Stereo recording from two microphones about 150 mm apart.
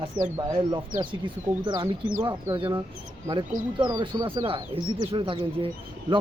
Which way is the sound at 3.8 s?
30° right (ahead or behind).